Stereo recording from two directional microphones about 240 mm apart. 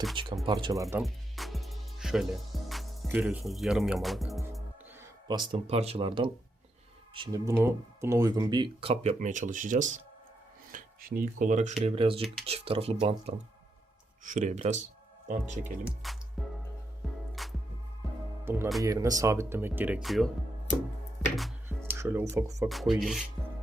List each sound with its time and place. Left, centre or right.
0.4 s speech: centre
1.0 s music: centre
5.3 s speech: centre
16.0 s music: centre
18.4 s speech: centre
22.7 s rub: centre